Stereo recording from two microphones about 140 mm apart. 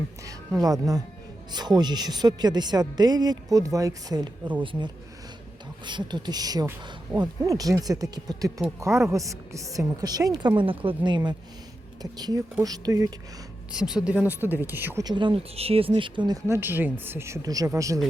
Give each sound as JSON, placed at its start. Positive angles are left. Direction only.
{"t": 0.3, "sound": "a woman's voice", "side_deg": -25}
{"t": 13.7, "sound": "speech", "side_deg": -5}
{"t": 15.0, "sound": "speech", "side_deg": -35}
{"t": 16.5, "sound": "a woman's voice", "side_deg": -15}